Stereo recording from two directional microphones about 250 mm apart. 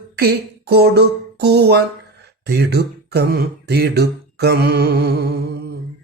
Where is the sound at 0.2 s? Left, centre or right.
Right.